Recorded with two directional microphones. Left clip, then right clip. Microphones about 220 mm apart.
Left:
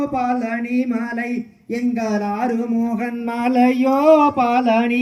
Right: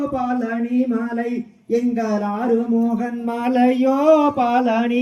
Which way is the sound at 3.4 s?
25° left (ahead or behind).